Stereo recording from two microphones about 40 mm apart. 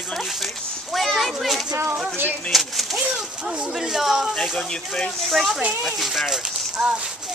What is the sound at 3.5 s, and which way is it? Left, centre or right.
Speech, right.